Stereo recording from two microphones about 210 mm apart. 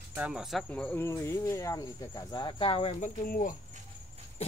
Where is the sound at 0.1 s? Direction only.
5° right (ahead or behind); by 3.5 s 40° left (ahead or behind).